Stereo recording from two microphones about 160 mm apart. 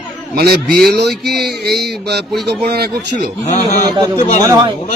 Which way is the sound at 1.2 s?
90° right.